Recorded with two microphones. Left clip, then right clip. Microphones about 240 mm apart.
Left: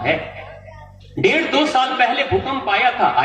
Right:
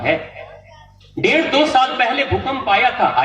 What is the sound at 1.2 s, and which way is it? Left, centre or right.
Speech, right.